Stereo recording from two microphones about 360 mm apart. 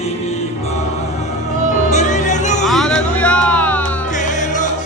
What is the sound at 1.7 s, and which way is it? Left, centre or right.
Music, centre.